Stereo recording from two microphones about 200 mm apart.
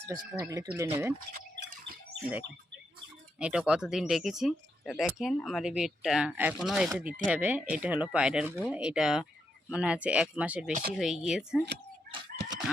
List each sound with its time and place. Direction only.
0.1 s speech: 15° right (ahead or behind)
1.3 s a sound: 45° right (ahead or behind)
3.3 s speech: 5° right (ahead or behind)
10.7 s speech: 40° right (ahead or behind)
10.9 s speech: centre (ahead or behind)
12.4 s chicken: 5° right (ahead or behind)